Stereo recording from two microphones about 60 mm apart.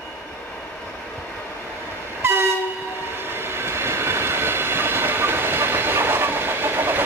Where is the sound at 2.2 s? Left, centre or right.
Right.